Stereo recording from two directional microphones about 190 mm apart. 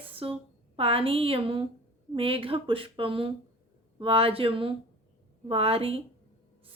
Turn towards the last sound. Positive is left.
turn(degrees=-30)  # may be behind; listen again after turning